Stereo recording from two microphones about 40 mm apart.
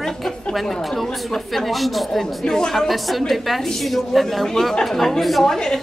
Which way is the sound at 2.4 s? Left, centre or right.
Centre.